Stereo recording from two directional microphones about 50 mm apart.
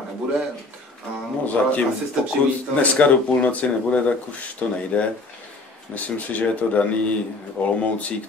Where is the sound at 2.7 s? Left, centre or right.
Left.